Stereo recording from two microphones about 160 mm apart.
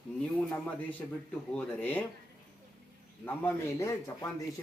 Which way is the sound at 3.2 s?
15° left (ahead or behind).